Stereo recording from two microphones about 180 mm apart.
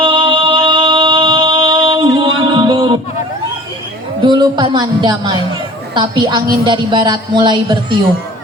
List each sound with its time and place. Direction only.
0.0 s music: 25° right (ahead or behind)
4.2 s speech: 25° right (ahead or behind)